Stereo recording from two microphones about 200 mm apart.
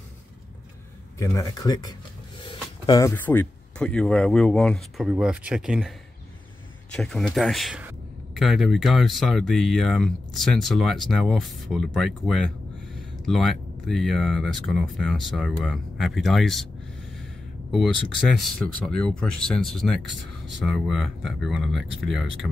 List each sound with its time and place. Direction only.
1.1 s speech: 15° left (ahead or behind); by 16.6 s centre (ahead or behind)
17.6 s speech: centre (ahead or behind)